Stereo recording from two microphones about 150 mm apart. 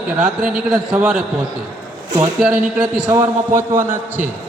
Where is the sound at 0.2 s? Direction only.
5° right (ahead or behind).